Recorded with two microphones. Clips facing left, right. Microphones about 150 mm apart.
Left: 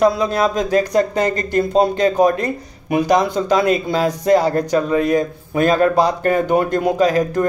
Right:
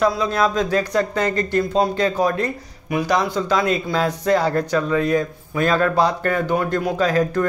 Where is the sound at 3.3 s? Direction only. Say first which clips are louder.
Left 4 dB; 20° left (ahead or behind).